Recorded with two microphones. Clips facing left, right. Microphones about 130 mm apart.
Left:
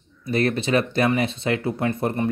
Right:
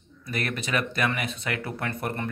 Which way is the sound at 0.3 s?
30° left (ahead or behind).